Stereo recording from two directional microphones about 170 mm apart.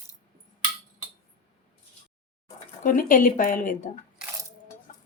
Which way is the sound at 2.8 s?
50° left (ahead or behind).